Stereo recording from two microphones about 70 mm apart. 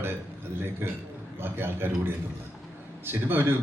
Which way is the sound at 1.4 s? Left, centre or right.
Right.